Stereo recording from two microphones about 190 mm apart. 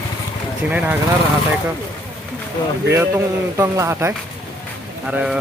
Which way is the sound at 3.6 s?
15° right (ahead or behind).